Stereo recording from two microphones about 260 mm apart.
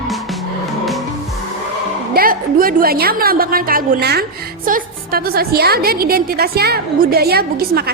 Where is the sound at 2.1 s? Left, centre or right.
Right.